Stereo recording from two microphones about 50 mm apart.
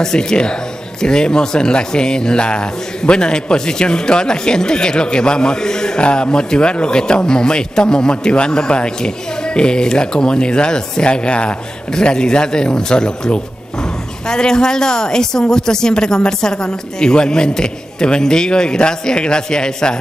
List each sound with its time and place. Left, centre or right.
0.0 s speech: centre